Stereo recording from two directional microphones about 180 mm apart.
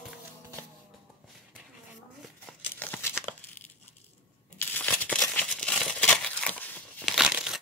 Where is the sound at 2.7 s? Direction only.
10° left (ahead or behind).